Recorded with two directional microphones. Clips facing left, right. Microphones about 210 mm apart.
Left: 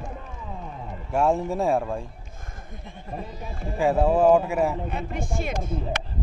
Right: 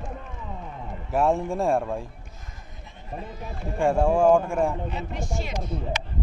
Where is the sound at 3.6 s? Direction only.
5° left (ahead or behind).